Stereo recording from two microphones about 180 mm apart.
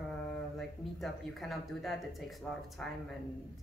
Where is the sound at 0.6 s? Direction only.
Centre (ahead or behind).